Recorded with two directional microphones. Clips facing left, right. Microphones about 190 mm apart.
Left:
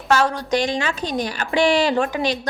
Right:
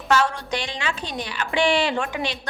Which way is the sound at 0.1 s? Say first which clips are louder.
Left 3 dB; 40° left (ahead or behind).